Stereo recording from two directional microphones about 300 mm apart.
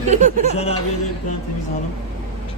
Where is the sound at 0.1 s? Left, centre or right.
Right.